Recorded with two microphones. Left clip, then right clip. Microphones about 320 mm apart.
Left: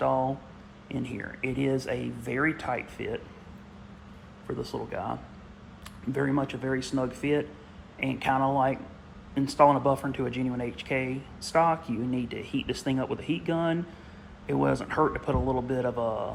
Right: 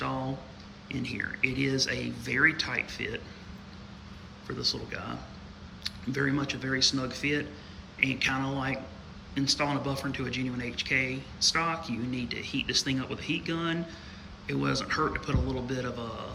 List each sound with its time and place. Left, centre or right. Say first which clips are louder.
0.9 s speech: right 2 dB; centre
4.6 s speech: right 2 dB; centre